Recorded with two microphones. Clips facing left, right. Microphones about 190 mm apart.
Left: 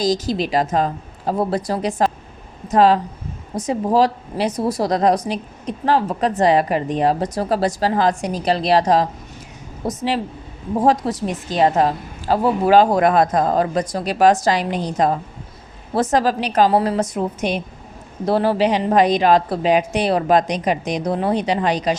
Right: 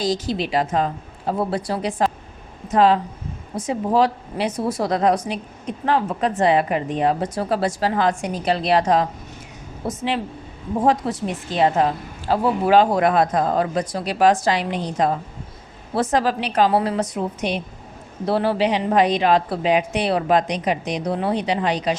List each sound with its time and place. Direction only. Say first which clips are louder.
0.0 s a woman's voice: left 3 dB; 40° left (ahead or behind)